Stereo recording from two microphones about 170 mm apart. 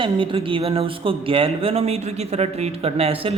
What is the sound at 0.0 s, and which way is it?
Speech, 30° right (ahead or behind).